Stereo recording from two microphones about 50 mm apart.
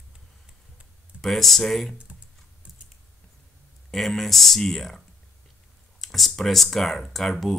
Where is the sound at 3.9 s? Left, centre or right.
Centre.